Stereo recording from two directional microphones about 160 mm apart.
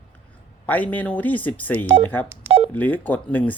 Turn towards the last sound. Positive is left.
turn(degrees=10)  # may be behind; listen again after turning